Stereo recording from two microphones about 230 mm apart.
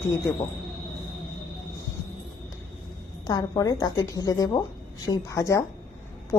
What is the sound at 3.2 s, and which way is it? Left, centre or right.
A woman's voice, centre.